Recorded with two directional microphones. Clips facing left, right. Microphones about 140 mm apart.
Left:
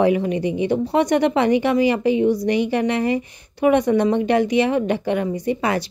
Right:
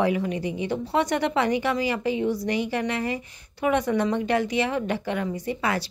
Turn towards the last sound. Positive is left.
turn(degrees=20)  # may be behind; listen again after turning